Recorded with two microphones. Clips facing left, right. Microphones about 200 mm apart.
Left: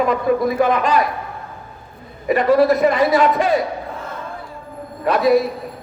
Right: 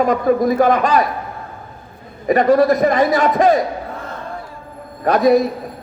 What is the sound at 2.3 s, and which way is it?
A man's voice, 45° right (ahead or behind).